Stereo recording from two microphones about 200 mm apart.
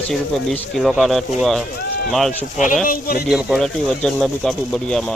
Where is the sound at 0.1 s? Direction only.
Centre (ahead or behind).